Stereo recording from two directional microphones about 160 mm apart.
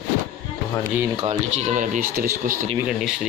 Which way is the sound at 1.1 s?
40° right (ahead or behind).